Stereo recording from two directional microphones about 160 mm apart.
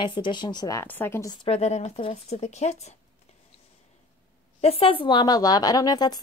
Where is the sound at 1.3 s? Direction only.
40° left (ahead or behind).